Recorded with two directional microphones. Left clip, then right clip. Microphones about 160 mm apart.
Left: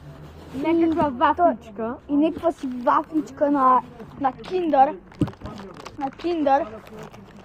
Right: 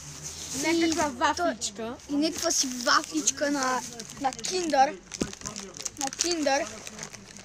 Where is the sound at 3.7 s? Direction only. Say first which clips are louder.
Left 11 dB; 15° left (ahead or behind).